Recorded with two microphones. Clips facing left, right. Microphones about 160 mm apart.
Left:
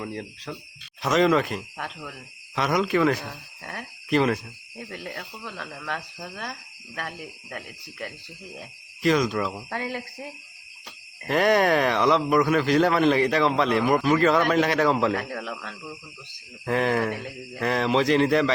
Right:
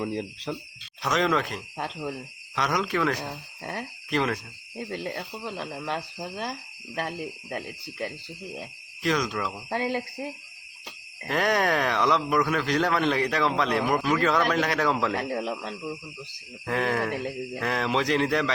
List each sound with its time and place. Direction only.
0.0 s speech: 20° right (ahead or behind)
1.0 s speech: centre (ahead or behind)
1.8 s speech: 30° right (ahead or behind)
2.6 s speech: 5° left (ahead or behind)
3.6 s speech: 30° right (ahead or behind)
4.1 s speech: 5° left (ahead or behind)
4.8 s speech: 30° right (ahead or behind)
9.0 s speech: centre (ahead or behind)
9.6 s speech: 25° right (ahead or behind)
11.3 s speech: centre (ahead or behind)
15.1 s speech: 30° right (ahead or behind)
16.6 s speech: centre (ahead or behind)